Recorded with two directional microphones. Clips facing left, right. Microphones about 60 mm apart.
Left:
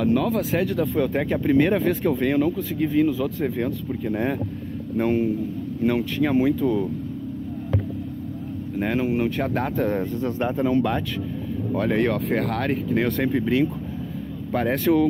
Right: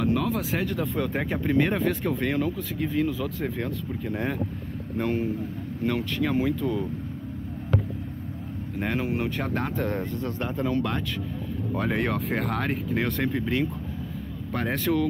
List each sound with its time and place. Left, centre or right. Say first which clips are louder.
0.0 s speech: left 4 dB; centre
4.9 s speech: left 5 dB; centre
8.7 s speech: left 5 dB; centre
10.2 s speech: left 7 dB; centre
11.7 s speech: left 5 dB; centre